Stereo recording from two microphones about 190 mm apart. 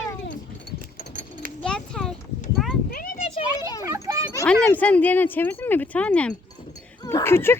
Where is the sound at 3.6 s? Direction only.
20° left (ahead or behind).